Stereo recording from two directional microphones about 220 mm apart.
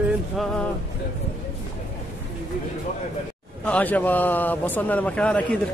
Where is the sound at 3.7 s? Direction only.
5° left (ahead or behind).